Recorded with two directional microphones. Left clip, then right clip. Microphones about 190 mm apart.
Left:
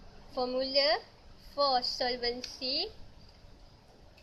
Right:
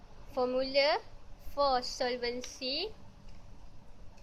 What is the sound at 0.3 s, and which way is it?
A woman's voice, 25° right (ahead or behind).